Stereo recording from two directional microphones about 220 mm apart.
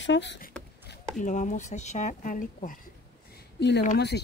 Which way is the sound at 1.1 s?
35° left (ahead or behind).